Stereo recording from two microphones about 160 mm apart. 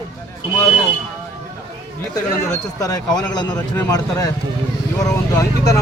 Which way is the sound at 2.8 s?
25° left (ahead or behind).